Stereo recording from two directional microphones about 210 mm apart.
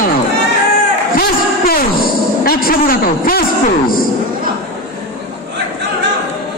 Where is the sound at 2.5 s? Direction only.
45° left (ahead or behind).